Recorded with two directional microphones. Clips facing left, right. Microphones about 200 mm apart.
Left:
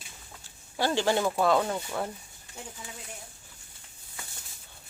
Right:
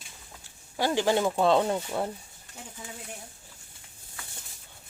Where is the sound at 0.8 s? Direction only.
15° right (ahead or behind).